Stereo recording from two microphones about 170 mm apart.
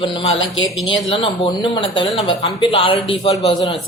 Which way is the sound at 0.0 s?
30° left (ahead or behind).